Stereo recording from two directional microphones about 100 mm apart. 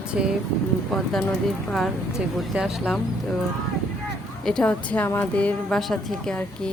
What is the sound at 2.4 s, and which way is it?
Speech, 5° right (ahead or behind).